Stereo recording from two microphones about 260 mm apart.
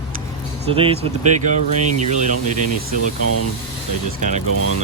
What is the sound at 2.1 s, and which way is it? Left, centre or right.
Speech, right.